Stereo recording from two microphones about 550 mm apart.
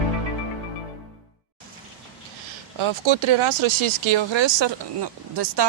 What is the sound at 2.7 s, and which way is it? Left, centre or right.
Speech, right.